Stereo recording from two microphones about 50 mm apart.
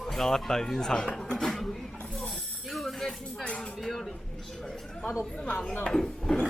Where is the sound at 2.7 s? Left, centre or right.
Centre.